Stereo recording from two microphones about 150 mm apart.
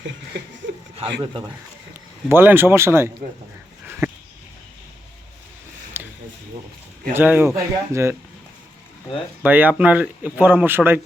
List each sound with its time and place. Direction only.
0.9 s speech: 35° right (ahead or behind)
2.3 s speech: 15° right (ahead or behind)
6.0 s a sound: 15° right (ahead or behind)
7.1 s speech: 15° right (ahead or behind)
9.4 s speech: 10° right (ahead or behind)